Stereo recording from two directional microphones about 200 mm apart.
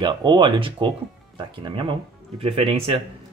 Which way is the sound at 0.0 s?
20° right (ahead or behind).